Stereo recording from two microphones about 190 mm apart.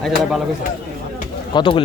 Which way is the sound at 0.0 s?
Centre (ahead or behind).